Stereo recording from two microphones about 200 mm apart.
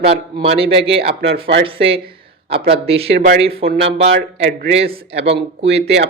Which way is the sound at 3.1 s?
55° right (ahead or behind).